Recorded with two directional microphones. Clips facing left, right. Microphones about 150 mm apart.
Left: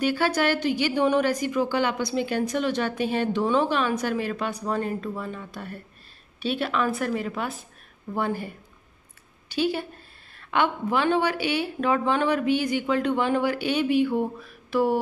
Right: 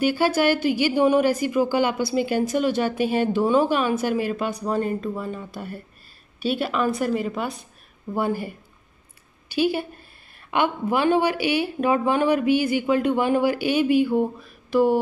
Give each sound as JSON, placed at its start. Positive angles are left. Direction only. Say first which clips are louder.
{"t": 0.0, "sound": "a woman's voice", "louder": "right 3 dB", "side_deg": -10}
{"t": 9.5, "sound": "a woman's voice", "louder": "right 3 dB", "side_deg": -10}